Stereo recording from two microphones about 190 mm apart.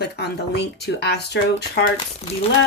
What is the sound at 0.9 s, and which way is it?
Speech, 60° left (ahead or behind).